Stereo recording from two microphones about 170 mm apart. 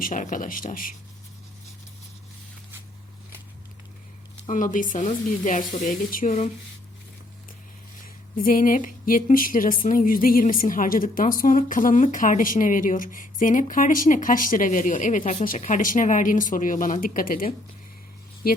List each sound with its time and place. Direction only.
0.0 s speech: 50° left (ahead or behind)
4.4 s speech: 50° left (ahead or behind)
8.0 s speech: 55° left (ahead or behind)